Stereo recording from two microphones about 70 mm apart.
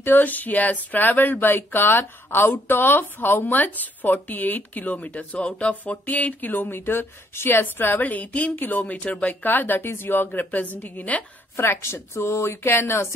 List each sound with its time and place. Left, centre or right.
0.0 s speech: left
11.5 s a woman's voice: left